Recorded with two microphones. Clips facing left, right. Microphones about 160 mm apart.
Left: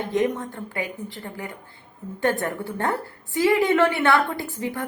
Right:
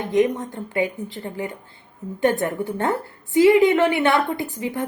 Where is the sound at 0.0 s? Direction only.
20° right (ahead or behind).